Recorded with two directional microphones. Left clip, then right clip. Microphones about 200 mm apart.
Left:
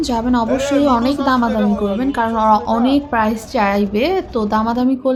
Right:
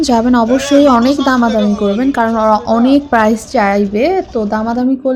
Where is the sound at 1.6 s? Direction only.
55° left (ahead or behind).